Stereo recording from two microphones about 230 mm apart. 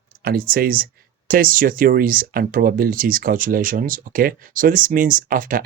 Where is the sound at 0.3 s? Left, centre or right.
Right.